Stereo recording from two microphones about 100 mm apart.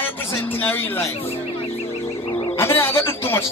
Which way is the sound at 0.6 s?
20° left (ahead or behind).